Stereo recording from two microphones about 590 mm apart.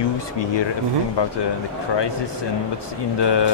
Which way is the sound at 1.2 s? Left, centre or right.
Left.